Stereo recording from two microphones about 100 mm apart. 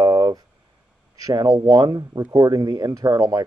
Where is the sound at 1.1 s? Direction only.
35° right (ahead or behind).